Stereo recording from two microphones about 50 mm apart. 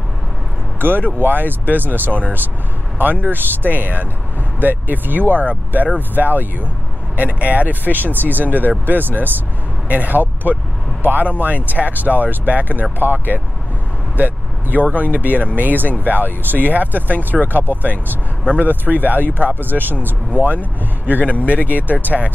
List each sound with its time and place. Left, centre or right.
0.7 s speech: right
2.0 s speech: left
3.0 s speech: right
18.4 s speech: right
21.6 s speech: right